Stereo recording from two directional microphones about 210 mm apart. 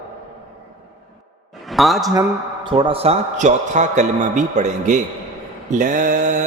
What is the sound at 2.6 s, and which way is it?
A man's voice, 25° right (ahead or behind).